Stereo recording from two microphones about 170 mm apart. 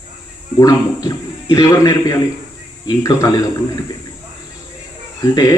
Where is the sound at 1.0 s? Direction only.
20° left (ahead or behind).